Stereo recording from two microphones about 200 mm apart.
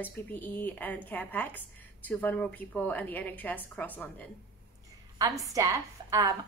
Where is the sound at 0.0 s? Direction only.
10° left (ahead or behind).